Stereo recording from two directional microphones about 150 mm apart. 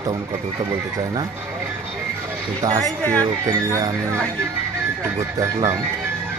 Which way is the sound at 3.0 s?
10° left (ahead or behind).